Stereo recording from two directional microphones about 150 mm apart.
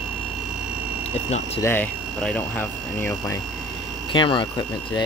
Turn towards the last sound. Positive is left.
turn(degrees=30)  # may be behind; listen again after turning